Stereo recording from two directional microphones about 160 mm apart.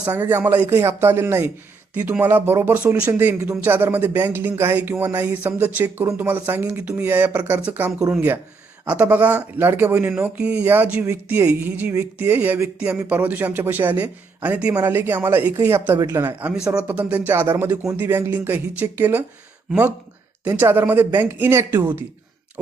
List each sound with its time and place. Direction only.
0.0 s speech: 15° right (ahead or behind)
20.5 s speech: 15° right (ahead or behind)